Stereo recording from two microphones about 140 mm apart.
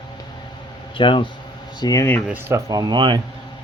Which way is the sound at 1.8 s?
20° left (ahead or behind).